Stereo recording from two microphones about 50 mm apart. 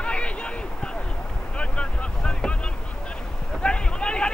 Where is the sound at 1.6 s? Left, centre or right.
Left.